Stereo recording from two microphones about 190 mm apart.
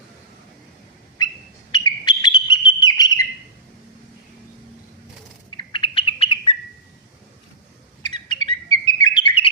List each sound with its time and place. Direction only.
1.2 s a sound: 20° left (ahead or behind)
1.7 s bird: 20° left (ahead or behind)
5.5 s bird: 25° left (ahead or behind)
8.0 s bird: 25° left (ahead or behind)